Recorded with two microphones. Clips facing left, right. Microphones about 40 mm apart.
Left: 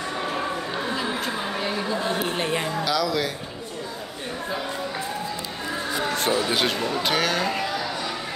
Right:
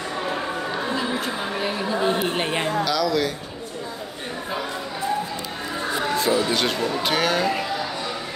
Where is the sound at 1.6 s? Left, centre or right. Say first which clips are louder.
Right 5 dB; centre.